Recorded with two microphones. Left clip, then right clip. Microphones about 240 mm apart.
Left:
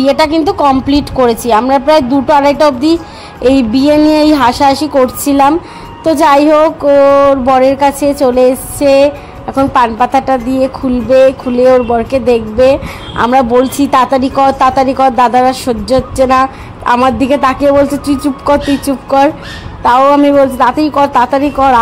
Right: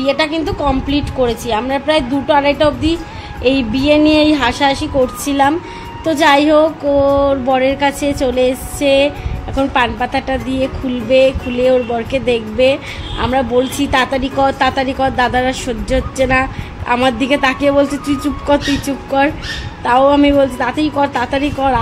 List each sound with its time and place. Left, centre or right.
0.0 s a woman's voice: left; by 21.7 s centre